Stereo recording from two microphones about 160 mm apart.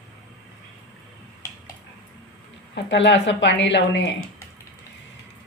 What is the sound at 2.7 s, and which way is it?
Speech, 90° left.